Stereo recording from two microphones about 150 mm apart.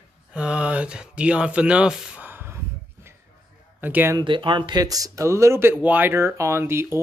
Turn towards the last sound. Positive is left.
turn(degrees=-15)  # may be behind; listen again after turning